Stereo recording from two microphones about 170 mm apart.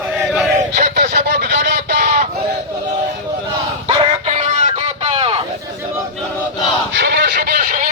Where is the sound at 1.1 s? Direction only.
85° right.